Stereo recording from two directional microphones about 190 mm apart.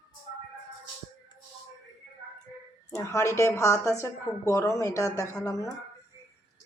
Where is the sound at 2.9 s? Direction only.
15° left (ahead or behind).